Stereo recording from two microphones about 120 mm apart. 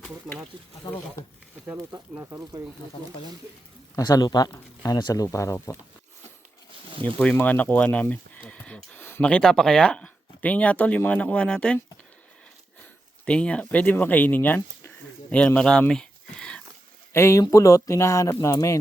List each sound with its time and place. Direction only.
0.9 s speech: 30° left (ahead or behind)
1.6 s speech: 15° right (ahead or behind)
3.9 s speech: 30° left (ahead or behind)
7.0 s speech: 10° left (ahead or behind)
13.2 s speech: 10° left (ahead or behind)
15.9 s a sound: 5° left (ahead or behind)
17.1 s speech: 25° left (ahead or behind)